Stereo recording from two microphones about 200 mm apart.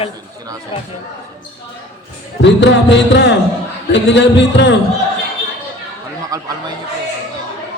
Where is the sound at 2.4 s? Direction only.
65° left (ahead or behind).